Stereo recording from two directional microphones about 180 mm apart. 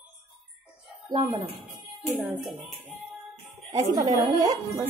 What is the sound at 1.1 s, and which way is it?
Speech, centre (ahead or behind).